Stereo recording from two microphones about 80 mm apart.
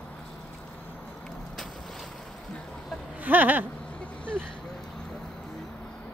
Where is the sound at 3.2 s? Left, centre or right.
Right.